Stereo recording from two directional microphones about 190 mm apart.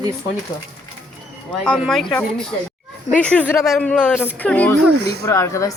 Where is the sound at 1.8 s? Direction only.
Centre (ahead or behind).